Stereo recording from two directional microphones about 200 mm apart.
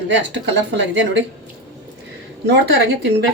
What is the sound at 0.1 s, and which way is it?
A woman's voice, 65° right (ahead or behind).